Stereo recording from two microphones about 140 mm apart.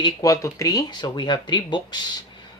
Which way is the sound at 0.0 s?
25° left (ahead or behind).